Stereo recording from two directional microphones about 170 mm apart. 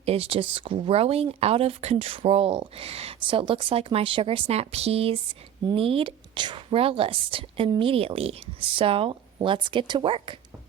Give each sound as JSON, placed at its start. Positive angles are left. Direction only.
{"t": 0.0, "sound": "speech", "side_deg": -35}